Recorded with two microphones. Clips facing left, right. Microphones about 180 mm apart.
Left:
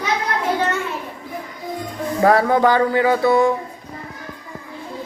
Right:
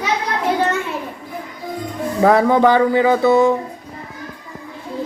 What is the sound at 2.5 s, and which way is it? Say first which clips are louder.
Speech: right 2 dB; 20° right (ahead or behind).